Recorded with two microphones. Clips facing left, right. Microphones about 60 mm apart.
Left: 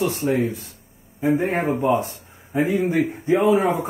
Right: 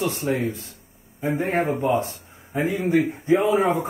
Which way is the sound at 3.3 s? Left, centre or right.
Left.